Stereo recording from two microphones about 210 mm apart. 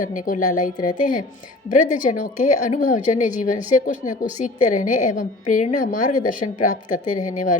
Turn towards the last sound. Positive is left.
turn(degrees=40)  # may be behind; listen again after turning